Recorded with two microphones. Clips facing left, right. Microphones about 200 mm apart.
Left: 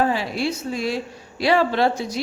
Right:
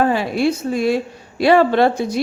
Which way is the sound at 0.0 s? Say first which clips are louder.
Right 5 dB; 55° right (ahead or behind).